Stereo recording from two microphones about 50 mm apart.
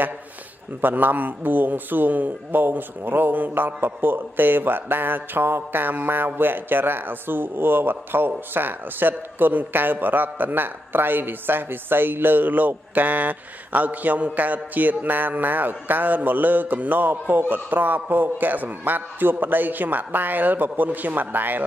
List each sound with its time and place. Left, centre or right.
0.7 s a man's voice: right